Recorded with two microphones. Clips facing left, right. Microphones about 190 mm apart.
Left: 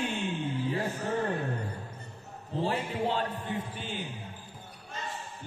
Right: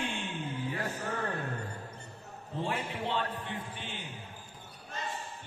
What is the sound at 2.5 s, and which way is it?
A man's voice, 35° left (ahead or behind).